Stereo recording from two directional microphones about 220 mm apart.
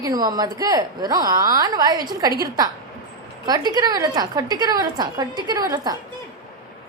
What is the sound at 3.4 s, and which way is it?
A woman's voice, 20° right (ahead or behind).